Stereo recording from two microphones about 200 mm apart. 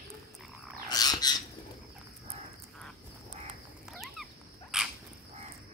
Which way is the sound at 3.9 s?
Centre (ahead or behind).